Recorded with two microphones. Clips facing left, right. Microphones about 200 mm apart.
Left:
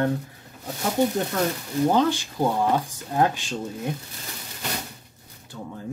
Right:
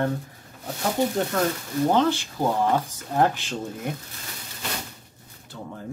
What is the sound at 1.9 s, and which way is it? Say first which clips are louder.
Speech: even; 15° left (ahead or behind).